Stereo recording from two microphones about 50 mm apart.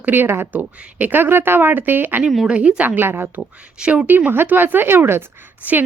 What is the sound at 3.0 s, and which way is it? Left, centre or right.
Speech, right.